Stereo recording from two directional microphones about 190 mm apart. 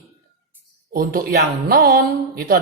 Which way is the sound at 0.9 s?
50° right (ahead or behind).